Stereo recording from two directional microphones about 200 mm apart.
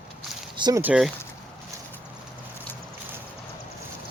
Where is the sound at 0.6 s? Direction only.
20° right (ahead or behind).